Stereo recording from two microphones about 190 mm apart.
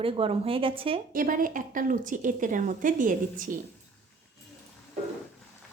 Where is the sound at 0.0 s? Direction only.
30° right (ahead or behind).